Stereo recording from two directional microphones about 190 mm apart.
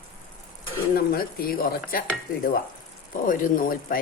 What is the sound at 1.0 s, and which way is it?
Speech, 50° left (ahead or behind).